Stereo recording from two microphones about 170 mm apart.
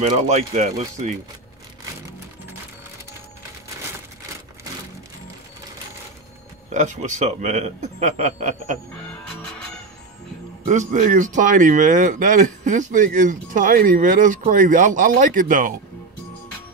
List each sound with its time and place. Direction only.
0.0 s speech: 40° right (ahead or behind)
6.7 s speech: 45° right (ahead or behind)
10.7 s speech: 45° right (ahead or behind)